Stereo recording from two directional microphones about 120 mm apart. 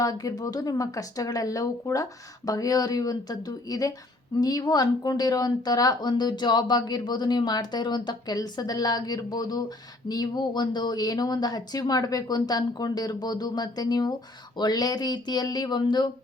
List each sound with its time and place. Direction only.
0.0 s a woman's voice: 30° left (ahead or behind)